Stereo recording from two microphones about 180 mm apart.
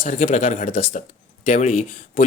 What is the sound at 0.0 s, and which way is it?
Speech, 40° left (ahead or behind).